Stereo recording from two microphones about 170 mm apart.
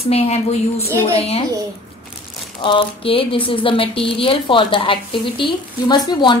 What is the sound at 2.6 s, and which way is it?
Speech, 30° left (ahead or behind).